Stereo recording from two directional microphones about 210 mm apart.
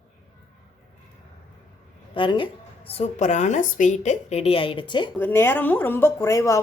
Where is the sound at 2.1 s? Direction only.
25° left (ahead or behind).